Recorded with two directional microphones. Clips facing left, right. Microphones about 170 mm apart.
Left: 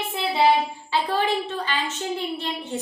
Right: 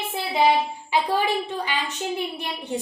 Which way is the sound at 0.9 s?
10° right (ahead or behind).